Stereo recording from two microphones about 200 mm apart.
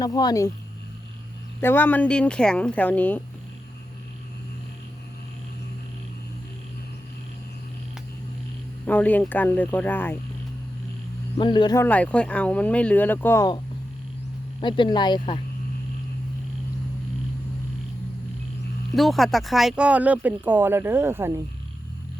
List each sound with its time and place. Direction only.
0.0 s speech: 20° left (ahead or behind)
1.6 s speech: 10° left (ahead or behind)
8.9 s speech: 10° left (ahead or behind)
11.3 s speech: 20° left (ahead or behind)
11.8 s speech: 5° left (ahead or behind)
14.6 s speech: 25° left (ahead or behind)
18.9 s speech: centre (ahead or behind)